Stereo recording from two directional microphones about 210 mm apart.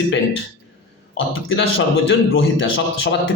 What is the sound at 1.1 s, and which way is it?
A man's voice, 70° left (ahead or behind).